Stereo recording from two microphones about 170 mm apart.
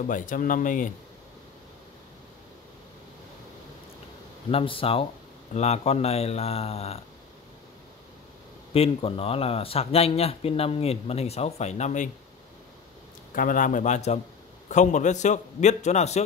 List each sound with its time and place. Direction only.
0.1 s a man's voice: 50° left (ahead or behind)
4.5 s speech: 35° left (ahead or behind)
8.7 s speech: 35° left (ahead or behind)
13.3 s a man's voice: 50° left (ahead or behind)